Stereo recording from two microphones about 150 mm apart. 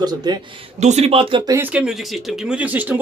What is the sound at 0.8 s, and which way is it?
Speech, 45° right (ahead or behind).